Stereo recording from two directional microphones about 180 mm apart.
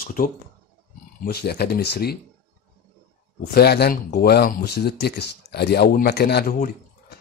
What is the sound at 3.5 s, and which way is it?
Speech, 60° left (ahead or behind).